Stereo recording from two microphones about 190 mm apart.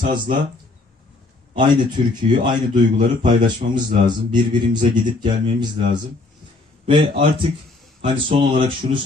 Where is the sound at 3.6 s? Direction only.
45° right (ahead or behind).